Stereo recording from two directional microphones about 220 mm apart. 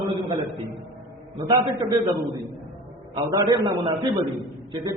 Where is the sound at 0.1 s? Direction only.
20° right (ahead or behind).